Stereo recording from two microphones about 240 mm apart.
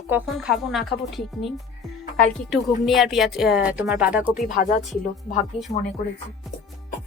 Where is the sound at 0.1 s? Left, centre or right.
Centre.